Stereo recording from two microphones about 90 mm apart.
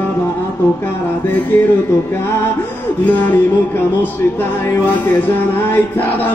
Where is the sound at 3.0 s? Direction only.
20° left (ahead or behind).